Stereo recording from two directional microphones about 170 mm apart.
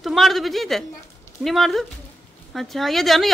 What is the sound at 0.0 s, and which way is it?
A woman's voice, centre (ahead or behind).